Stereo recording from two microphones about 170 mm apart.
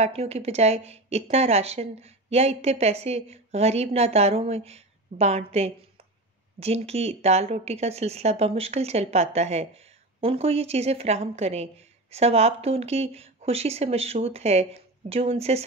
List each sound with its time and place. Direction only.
0.0 s a woman's voice: 35° right (ahead or behind)